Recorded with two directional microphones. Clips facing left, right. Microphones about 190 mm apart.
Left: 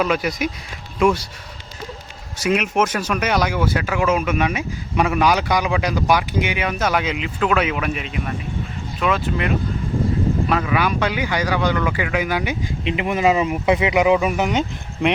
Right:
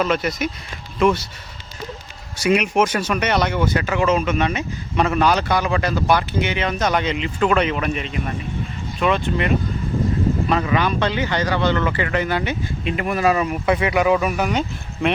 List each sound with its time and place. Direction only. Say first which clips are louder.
0.0 s speech: even; centre (ahead or behind)
2.4 s speech: right 2 dB; centre (ahead or behind)
10.5 s speech: even; 5° left (ahead or behind)